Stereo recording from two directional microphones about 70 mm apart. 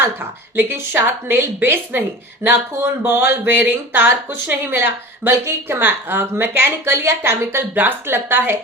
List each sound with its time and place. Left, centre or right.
0.5 s speech: right